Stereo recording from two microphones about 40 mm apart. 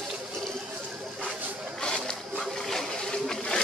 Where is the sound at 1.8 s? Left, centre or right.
Centre.